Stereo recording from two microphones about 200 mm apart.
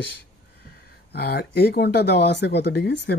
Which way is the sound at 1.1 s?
55° left (ahead or behind).